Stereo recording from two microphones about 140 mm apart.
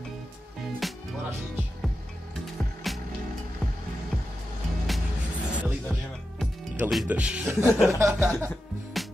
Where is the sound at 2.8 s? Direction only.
Centre (ahead or behind).